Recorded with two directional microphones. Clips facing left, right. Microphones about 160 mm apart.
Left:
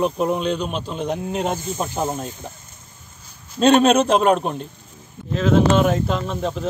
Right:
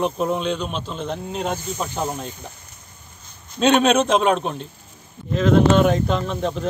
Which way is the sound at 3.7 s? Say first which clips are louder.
Left 2 dB; 5° left (ahead or behind).